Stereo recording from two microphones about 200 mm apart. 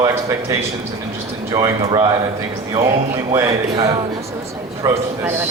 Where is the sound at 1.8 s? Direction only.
20° right (ahead or behind).